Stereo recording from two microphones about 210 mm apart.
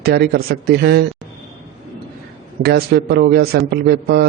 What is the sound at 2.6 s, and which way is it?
Speech, 50° right (ahead or behind).